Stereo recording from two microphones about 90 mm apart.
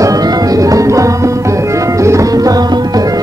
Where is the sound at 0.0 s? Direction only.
45° right (ahead or behind).